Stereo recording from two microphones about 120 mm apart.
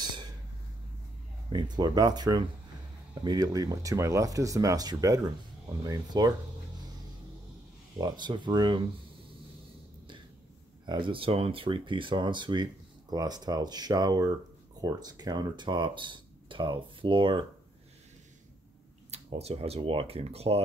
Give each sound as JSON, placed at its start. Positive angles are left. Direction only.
{"t": 0.0, "sound": "a sound", "side_deg": -40}
{"t": 1.5, "sound": "speech", "side_deg": -35}
{"t": 8.0, "sound": "speech", "side_deg": -40}
{"t": 10.9, "sound": "speech", "side_deg": -45}
{"t": 19.0, "sound": "speech", "side_deg": -60}